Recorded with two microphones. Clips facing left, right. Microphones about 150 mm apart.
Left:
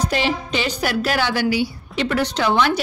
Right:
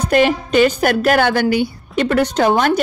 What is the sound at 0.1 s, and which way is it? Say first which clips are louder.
Speech: right 8 dB; 50° right (ahead or behind).